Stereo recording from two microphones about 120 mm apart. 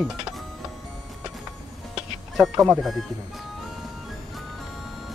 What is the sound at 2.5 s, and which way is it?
Speech, 20° right (ahead or behind).